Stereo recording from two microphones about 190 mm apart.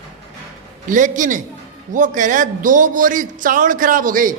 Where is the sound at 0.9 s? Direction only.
45° right (ahead or behind).